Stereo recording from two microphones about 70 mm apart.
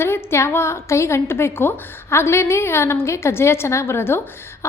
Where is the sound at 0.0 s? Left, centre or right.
Left.